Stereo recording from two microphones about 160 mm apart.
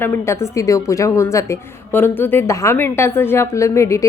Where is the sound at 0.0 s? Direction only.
15° left (ahead or behind).